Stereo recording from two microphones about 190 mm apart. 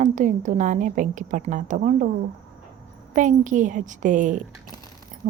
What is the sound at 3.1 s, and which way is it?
A woman's voice, 40° right (ahead or behind).